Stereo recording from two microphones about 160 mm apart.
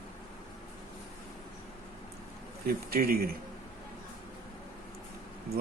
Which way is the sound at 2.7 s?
70° right (ahead or behind).